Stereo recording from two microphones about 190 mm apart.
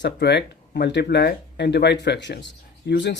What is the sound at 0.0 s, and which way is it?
Speech, 65° left (ahead or behind).